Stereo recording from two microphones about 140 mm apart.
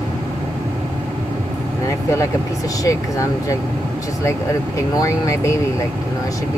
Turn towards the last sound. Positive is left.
turn(degrees=20)  # may be behind; listen again after turning